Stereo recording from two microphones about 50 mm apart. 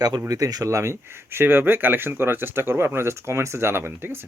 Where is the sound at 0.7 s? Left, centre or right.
Right.